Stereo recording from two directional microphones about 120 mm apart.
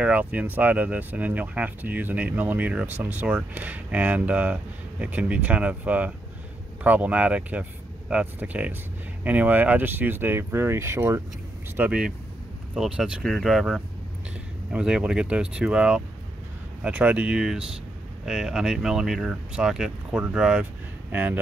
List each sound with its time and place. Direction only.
0.0 s speech: 10° right (ahead or behind)
11.7 s speech: 10° right (ahead or behind)